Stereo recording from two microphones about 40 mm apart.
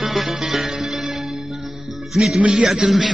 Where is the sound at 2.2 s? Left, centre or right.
Right.